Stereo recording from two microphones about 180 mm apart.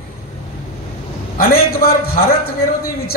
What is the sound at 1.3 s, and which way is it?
Speech, 55° left (ahead or behind).